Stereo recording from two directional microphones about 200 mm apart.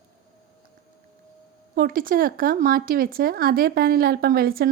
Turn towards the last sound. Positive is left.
turn(degrees=-50)  # may be behind; listen again after turning